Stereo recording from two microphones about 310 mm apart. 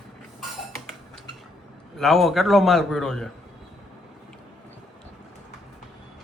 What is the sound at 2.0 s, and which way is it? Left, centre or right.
A man's voice, centre.